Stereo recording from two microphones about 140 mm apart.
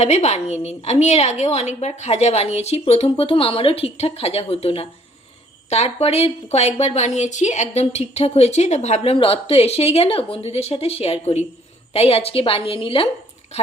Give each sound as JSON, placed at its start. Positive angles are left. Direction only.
{"t": 0.0, "sound": "a woman's voice", "side_deg": 50}
{"t": 9.1, "sound": "a woman's voice", "side_deg": 40}